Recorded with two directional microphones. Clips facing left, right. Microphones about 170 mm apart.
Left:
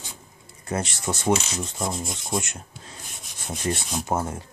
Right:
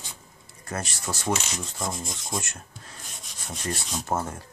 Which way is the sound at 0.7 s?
20° left (ahead or behind).